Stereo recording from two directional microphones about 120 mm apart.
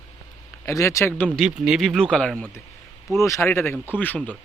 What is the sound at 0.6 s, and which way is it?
Speech, 25° left (ahead or behind).